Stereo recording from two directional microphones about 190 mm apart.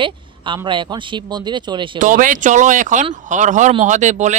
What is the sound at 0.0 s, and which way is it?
A man's voice, 25° right (ahead or behind).